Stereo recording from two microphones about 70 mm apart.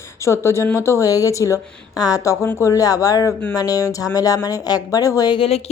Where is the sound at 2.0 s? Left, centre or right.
Left.